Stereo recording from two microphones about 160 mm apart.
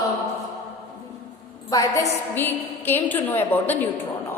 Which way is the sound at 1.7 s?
20° left (ahead or behind).